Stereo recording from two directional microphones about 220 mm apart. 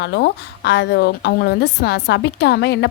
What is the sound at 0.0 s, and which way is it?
A woman's voice, 50° left (ahead or behind).